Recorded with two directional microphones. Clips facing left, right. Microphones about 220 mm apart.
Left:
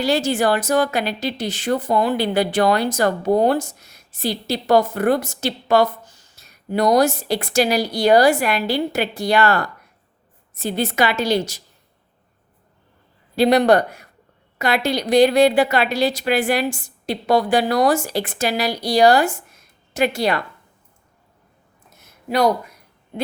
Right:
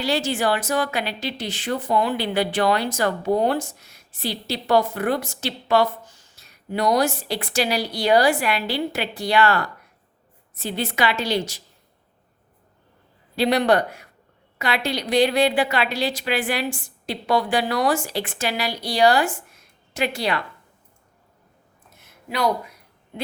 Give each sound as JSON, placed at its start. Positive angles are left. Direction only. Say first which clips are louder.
{"t": 0.0, "sound": "a woman's voice", "louder": "left 4 dB", "side_deg": 45}
{"t": 13.3, "sound": "a woman's voice", "louder": "left 4 dB", "side_deg": 45}
{"t": 22.3, "sound": "a woman's voice", "louder": "left 5 dB", "side_deg": 45}